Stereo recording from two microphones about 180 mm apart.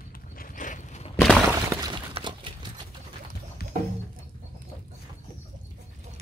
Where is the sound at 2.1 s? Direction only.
25° right (ahead or behind).